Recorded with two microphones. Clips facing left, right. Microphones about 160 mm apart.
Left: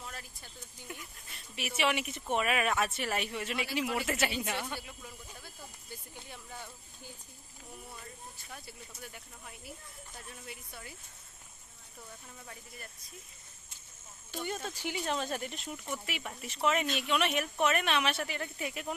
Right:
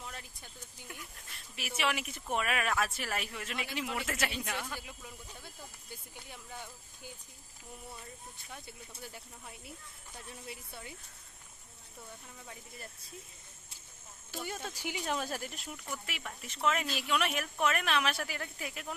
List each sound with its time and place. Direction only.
0.0 s a sound: 15° right (ahead or behind)
1.3 s speech: centre (ahead or behind)
4.8 s speech: 10° right (ahead or behind)
6.5 s a sound: 10° right (ahead or behind)
8.5 s speech: 25° right (ahead or behind)
10.2 s speech: 30° right (ahead or behind)
14.3 s speech: 5° right (ahead or behind)